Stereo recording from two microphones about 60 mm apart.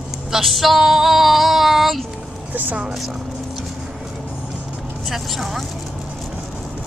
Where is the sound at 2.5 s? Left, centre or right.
Right.